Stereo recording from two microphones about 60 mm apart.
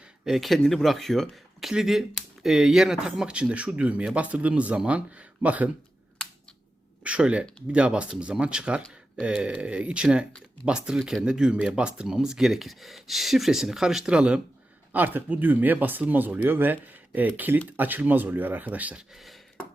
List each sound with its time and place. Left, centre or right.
0.3 s speech: centre; by 5.7 s right
7.0 s speech: centre
14.9 s speech: right
18.9 s speech: centre